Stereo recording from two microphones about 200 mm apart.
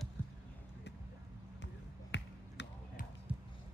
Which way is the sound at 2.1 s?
60° left (ahead or behind).